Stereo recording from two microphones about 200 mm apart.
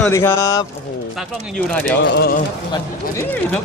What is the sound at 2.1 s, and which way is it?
Speech, 55° left (ahead or behind).